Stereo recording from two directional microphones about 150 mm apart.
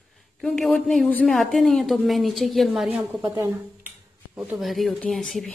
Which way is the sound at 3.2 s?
25° right (ahead or behind).